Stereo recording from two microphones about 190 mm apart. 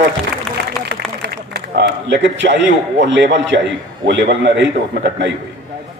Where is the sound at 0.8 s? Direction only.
60° right (ahead or behind).